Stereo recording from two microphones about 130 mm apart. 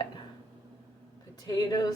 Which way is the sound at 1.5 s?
30° left (ahead or behind).